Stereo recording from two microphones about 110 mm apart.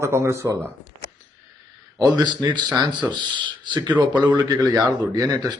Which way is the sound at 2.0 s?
40° right (ahead or behind).